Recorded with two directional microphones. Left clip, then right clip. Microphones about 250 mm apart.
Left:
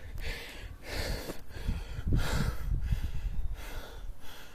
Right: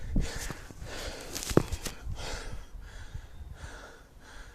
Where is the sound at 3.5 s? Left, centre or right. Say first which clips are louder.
Left 1 dB; centre.